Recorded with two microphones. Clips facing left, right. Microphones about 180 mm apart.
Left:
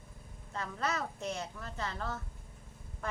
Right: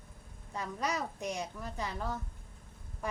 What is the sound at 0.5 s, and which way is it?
A woman's voice, 15° right (ahead or behind).